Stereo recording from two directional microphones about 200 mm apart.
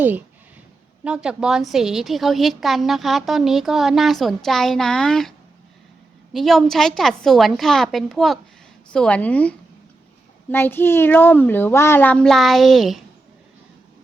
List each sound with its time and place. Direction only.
1.0 s a woman's voice: 5° right (ahead or behind)
6.3 s a woman's voice: centre (ahead or behind)